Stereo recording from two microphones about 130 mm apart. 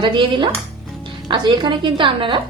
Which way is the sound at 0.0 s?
40° right (ahead or behind).